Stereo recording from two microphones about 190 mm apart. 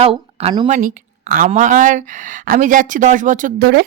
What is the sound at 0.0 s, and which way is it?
Speech, 30° right (ahead or behind).